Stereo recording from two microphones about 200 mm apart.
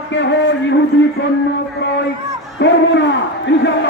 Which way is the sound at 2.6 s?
60° left (ahead or behind).